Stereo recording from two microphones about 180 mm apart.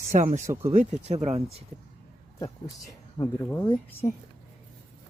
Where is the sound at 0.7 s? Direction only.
40° right (ahead or behind).